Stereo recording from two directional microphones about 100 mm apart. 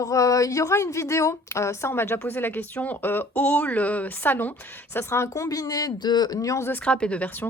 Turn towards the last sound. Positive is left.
turn(degrees=15)  # may be behind; listen again after turning